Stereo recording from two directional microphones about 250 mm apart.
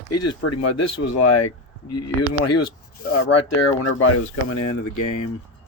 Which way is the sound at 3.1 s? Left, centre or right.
Left.